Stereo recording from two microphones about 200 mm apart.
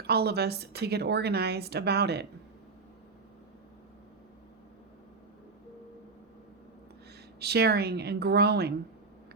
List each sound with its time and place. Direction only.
0.0 s a woman's voice: 50° right (ahead or behind)
7.3 s a woman's voice: 55° right (ahead or behind)